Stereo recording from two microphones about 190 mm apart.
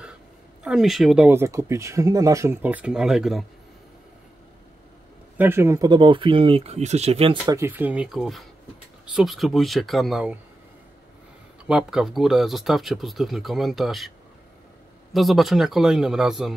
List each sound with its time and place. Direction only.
0.7 s speech: centre (ahead or behind)
5.4 s speech: 10° right (ahead or behind); by 7.3 s 30° right (ahead or behind)
7.4 s speech: 15° right (ahead or behind)
11.6 s speech: 5° right (ahead or behind)
15.1 s speech: centre (ahead or behind)